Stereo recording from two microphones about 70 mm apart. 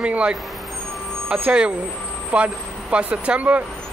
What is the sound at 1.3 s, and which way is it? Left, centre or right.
Speech, centre.